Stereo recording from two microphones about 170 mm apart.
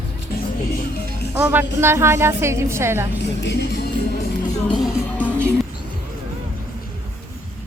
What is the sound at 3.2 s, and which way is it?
Music, 90° left.